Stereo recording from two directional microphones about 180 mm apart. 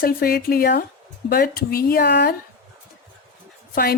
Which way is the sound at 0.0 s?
55° left (ahead or behind).